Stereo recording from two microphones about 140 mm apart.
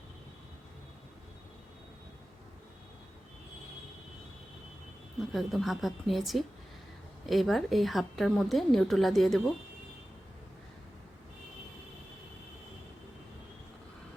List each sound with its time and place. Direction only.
5.3 s a woman's voice: centre (ahead or behind)